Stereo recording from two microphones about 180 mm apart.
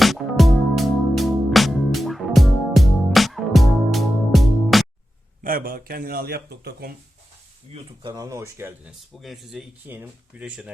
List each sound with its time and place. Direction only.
0.0 s music: centre (ahead or behind)
5.4 s speech: 55° right (ahead or behind)
7.7 s speech: 25° right (ahead or behind)
9.1 s speech: centre (ahead or behind)